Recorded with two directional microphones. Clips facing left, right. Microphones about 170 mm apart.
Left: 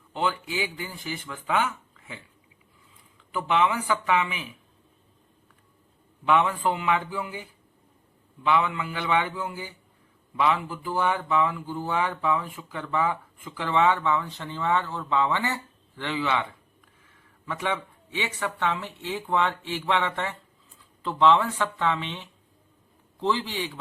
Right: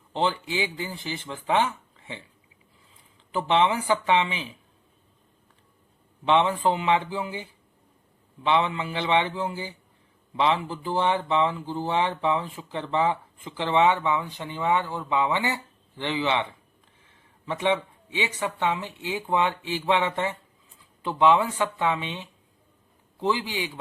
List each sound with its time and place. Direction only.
0.1 s speech: 30° right (ahead or behind)
6.2 s speech: 25° right (ahead or behind)
8.4 s speech: 25° right (ahead or behind)